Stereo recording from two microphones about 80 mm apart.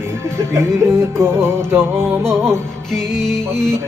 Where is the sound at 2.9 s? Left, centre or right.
Centre.